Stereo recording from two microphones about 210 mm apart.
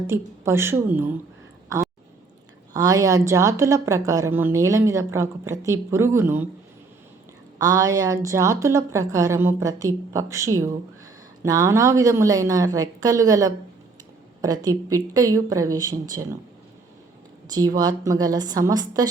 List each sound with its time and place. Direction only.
0.1 s a woman's voice: 10° right (ahead or behind)
2.7 s a woman's voice: 15° right (ahead or behind)
7.6 s a woman's voice: 15° right (ahead or behind)
17.5 s a woman's voice: 15° right (ahead or behind)